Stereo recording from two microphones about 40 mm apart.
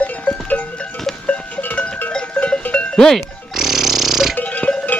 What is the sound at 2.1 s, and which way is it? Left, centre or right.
Cowbell, left.